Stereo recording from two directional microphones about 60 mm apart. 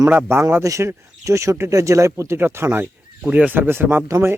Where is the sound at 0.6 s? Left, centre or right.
Right.